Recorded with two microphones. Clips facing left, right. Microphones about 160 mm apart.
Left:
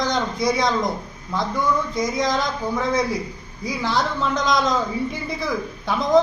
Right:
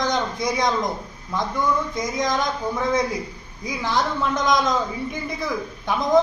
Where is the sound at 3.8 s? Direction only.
15° right (ahead or behind).